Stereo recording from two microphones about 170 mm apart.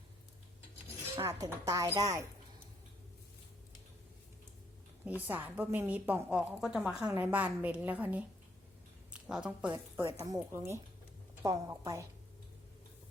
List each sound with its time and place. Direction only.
1.2 s speech: 20° right (ahead or behind)
5.0 s a woman's voice: 10° right (ahead or behind)
9.2 s speech: 5° right (ahead or behind)
10.0 s speech: 25° right (ahead or behind)